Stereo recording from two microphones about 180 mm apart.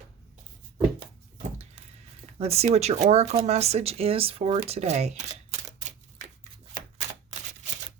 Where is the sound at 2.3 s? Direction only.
35° right (ahead or behind).